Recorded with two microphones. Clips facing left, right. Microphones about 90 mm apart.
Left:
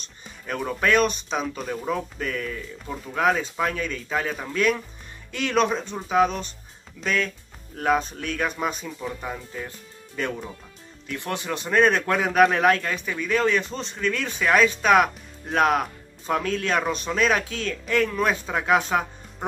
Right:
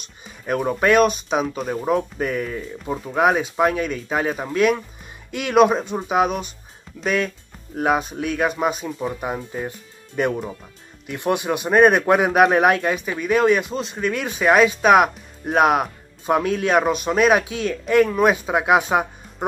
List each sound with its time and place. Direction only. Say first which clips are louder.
0.0 s speech: right 5 dB; 10° right (ahead or behind)
9.3 s speech: right 6 dB; 30° right (ahead or behind)
10.1 s speech: right 7 dB; 15° right (ahead or behind)